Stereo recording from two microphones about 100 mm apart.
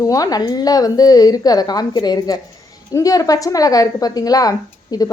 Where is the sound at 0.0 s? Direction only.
35° left (ahead or behind).